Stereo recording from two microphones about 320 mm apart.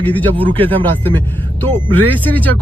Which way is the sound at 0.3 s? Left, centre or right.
Centre.